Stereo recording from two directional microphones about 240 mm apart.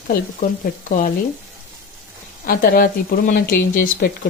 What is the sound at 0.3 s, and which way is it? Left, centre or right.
Speech, left.